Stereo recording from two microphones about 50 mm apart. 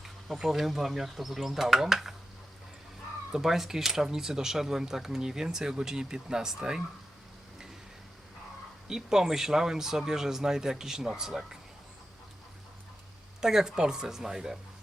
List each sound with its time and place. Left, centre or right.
0.4 s speech: centre
3.3 s speech: centre
8.9 s speech: centre
13.4 s speech: centre